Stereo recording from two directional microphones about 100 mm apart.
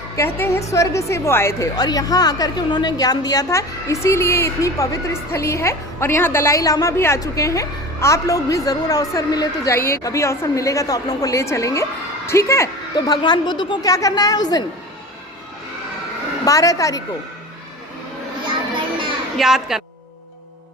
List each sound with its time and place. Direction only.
0.2 s a woman's voice: 25° left (ahead or behind)
1.7 s a woman's voice: 40° left (ahead or behind)
13.1 s a woman's voice: 45° left (ahead or behind)
16.4 s a woman's voice: 35° left (ahead or behind)
19.4 s a woman's voice: 5° right (ahead or behind)